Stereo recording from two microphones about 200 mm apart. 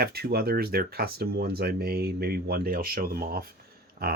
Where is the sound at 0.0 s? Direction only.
50° right (ahead or behind).